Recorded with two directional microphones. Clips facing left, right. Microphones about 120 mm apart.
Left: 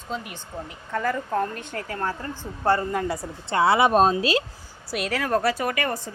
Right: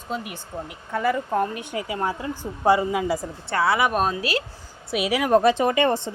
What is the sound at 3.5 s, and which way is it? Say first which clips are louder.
Speech: left 3 dB; 25° left (ahead or behind).